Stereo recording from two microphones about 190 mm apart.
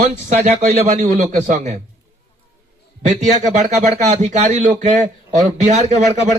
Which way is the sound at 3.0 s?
40° right (ahead or behind).